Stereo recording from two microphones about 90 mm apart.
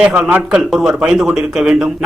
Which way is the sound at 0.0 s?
10° right (ahead or behind).